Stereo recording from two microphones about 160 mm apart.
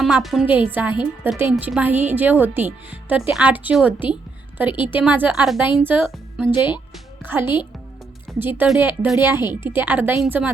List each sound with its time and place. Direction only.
0.0 s a woman's voice: centre (ahead or behind)
6.1 s music: centre (ahead or behind)
7.3 s a woman's voice: 15° right (ahead or behind)
9.4 s a woman's voice: 25° left (ahead or behind)
9.6 s a woman's voice: 10° right (ahead or behind)